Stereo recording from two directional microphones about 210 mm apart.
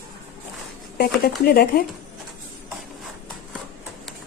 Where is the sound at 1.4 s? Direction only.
45° left (ahead or behind).